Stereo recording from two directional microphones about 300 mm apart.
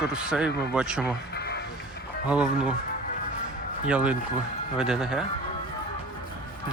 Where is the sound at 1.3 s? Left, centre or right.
Left.